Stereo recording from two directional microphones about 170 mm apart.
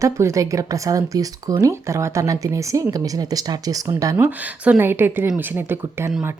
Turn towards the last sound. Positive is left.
turn(degrees=-10)  # may be behind; listen again after turning